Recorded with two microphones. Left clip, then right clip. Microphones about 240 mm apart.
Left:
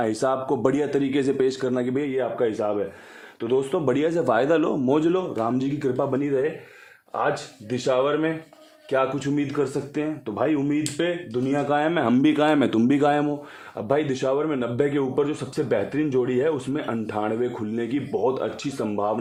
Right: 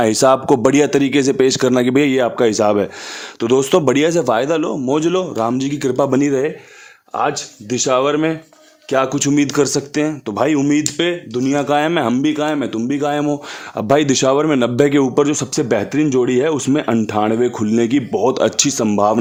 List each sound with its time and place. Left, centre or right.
0.0 s speech: right
12.1 s speech: centre
13.7 s speech: right